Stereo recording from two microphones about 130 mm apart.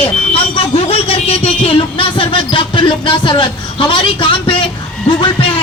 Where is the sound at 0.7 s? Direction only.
50° left (ahead or behind).